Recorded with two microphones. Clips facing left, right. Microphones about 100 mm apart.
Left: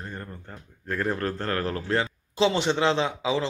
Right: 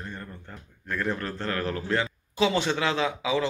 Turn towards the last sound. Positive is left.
turn(degrees=25)  # may be behind; listen again after turning